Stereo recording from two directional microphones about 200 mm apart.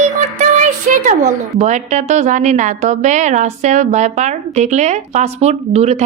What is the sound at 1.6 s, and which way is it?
A woman's voice, 35° right (ahead or behind).